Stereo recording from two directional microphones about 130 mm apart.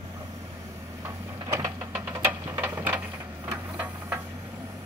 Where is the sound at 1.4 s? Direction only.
25° right (ahead or behind).